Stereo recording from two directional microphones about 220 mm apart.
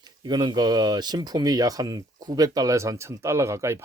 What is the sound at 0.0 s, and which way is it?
Speech, 20° right (ahead or behind).